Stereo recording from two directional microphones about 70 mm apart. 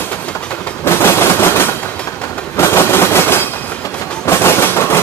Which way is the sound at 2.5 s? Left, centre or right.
Left.